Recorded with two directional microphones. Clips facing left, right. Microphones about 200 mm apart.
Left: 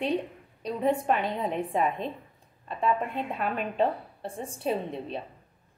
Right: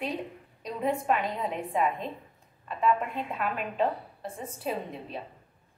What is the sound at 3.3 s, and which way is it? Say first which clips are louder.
A woman's voice: left 2 dB; 30° left (ahead or behind).